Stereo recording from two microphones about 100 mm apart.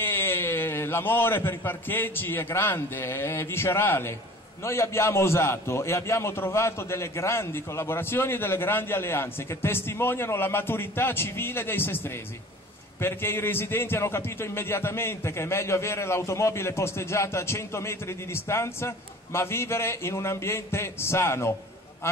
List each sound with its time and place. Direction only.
0.0 s a man's voice: 20° left (ahead or behind)